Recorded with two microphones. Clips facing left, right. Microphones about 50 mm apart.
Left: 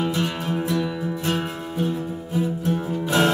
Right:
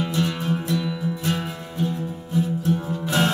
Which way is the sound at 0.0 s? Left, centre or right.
Centre.